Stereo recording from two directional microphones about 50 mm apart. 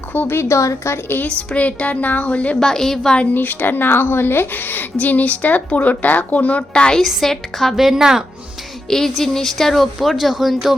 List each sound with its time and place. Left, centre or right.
0.1 s speech: left
0.3 s speech: left
1.0 s a woman's voice: left
1.3 s speech: left
2.6 s a woman's voice: centre
3.3 s a woman's voice: left; by 7.0 s centre
7.0 s a woman's voice: centre
8.9 s a woman's voice: centre